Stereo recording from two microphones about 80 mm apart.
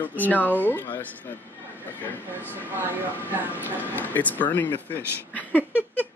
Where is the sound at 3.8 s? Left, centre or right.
Left.